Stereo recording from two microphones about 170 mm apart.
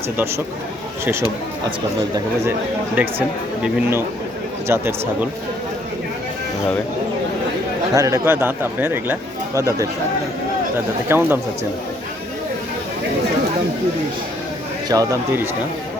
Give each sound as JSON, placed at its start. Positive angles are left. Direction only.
{"t": 2.1, "sound": "speech", "side_deg": -15}
{"t": 7.9, "sound": "speech", "side_deg": -20}
{"t": 11.1, "sound": "speech", "side_deg": -10}
{"t": 14.8, "sound": "speech", "side_deg": -20}